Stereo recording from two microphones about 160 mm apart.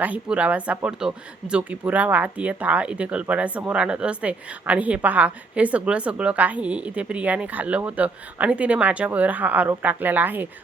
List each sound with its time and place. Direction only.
0.0 s speech: 10° right (ahead or behind)